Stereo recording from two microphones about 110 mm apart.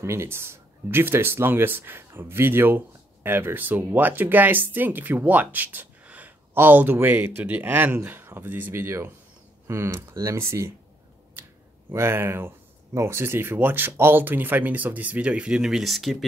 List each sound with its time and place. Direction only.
0.0 s speech: 25° right (ahead or behind)
11.9 s speech: 25° right (ahead or behind); by 16.3 s centre (ahead or behind)